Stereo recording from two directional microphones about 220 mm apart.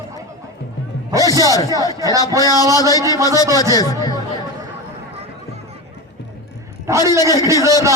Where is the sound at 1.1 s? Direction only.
15° right (ahead or behind).